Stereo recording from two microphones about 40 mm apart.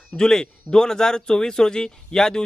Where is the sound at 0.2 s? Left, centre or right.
Centre.